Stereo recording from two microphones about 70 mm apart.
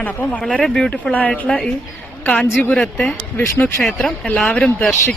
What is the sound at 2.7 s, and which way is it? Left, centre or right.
Speech, centre.